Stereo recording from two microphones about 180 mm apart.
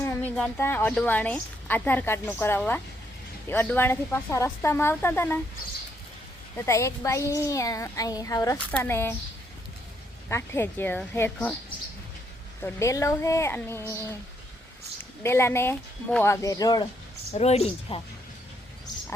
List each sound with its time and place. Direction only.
0.0 s a woman's voice: 10° left (ahead or behind)
6.7 s speech: 15° left (ahead or behind)
10.2 s speech: 15° left (ahead or behind)
12.6 s speech: 15° left (ahead or behind)
15.2 s speech: 15° left (ahead or behind)
17.3 s speech: 35° left (ahead or behind)